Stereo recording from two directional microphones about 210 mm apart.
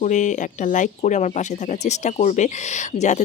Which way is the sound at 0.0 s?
35° left (ahead or behind).